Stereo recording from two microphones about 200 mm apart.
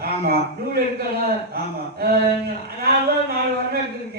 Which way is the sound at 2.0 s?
55° right (ahead or behind).